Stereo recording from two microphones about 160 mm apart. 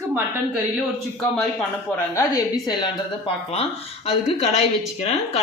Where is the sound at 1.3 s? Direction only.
10° left (ahead or behind).